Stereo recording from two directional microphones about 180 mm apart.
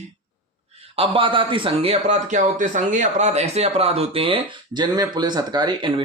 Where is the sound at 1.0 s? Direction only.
30° right (ahead or behind).